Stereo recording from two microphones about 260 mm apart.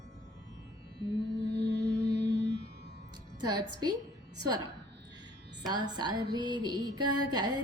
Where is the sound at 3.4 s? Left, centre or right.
Right.